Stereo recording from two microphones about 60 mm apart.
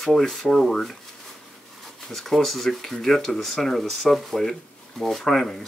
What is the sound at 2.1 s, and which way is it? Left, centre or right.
Speech, centre.